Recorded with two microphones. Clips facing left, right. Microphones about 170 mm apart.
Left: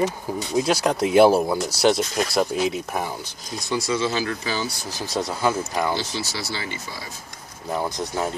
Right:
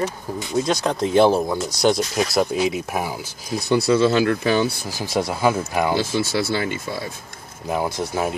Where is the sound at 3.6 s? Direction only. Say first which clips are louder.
Right 7 dB; 60° right (ahead or behind).